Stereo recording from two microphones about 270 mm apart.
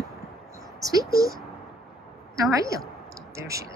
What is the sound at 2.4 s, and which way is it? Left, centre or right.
Speech, centre.